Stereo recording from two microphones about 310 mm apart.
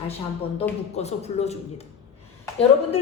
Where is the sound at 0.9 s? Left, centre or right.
Left.